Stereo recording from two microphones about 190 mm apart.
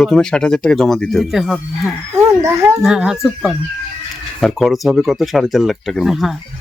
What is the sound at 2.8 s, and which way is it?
Speech, 5° right (ahead or behind).